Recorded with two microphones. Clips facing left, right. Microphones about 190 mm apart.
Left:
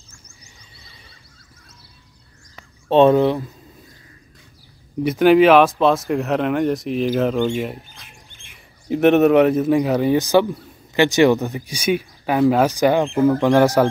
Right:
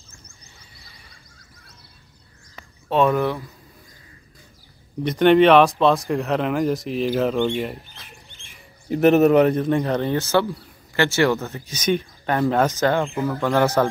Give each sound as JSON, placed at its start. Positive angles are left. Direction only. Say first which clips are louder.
{"t": 0.7, "sound": "music", "louder": "left 1 dB", "side_deg": 20}
{"t": 2.9, "sound": "speech", "louder": "left 6 dB", "side_deg": 25}
{"t": 5.0, "sound": "speech", "louder": "left 2 dB", "side_deg": 5}
{"t": 8.8, "sound": "speech", "louder": "left 1 dB", "side_deg": 0}